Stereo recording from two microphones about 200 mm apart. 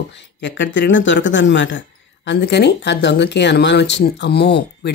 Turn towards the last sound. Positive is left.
turn(degrees=55)  # may be behind; listen again after turning